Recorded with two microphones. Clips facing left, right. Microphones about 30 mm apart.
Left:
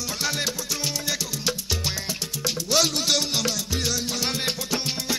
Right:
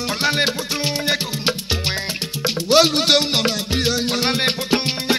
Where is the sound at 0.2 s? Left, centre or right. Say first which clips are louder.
Right 9 dB; right.